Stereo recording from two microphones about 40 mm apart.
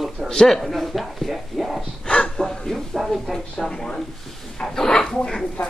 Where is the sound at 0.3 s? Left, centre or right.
Centre.